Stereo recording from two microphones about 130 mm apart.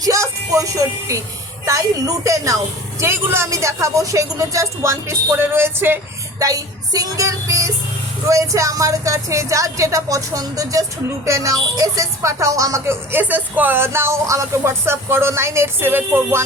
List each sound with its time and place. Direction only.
0.0 s speech: 25° right (ahead or behind)
6.4 s speech: 25° right (ahead or behind)